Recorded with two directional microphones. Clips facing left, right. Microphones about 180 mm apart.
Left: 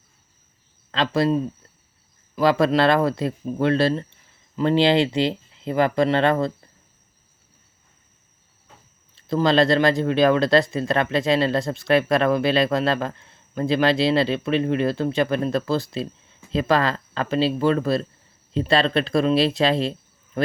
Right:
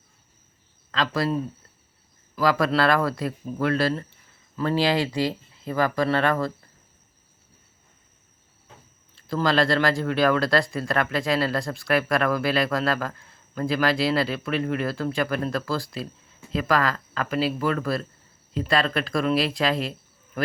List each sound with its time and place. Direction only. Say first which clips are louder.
0.9 s speech: left 4 dB; 25° left (ahead or behind)
9.1 s a man's voice: left 4 dB; 20° left (ahead or behind)